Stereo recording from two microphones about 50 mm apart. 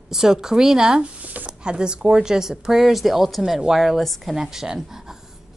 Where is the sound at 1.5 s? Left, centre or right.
Centre.